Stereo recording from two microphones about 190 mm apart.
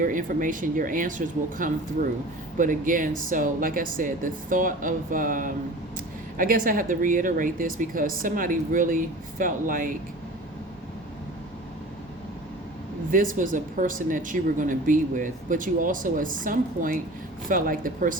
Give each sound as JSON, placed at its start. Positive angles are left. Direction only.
{"t": 0.0, "sound": "speech", "side_deg": -45}
{"t": 13.1, "sound": "speech", "side_deg": -45}